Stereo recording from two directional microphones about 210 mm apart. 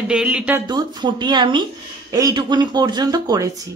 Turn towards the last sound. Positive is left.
turn(degrees=-20)  # may be behind; listen again after turning